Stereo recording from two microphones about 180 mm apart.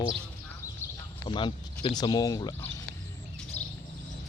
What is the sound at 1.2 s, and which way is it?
Speech, 30° left (ahead or behind).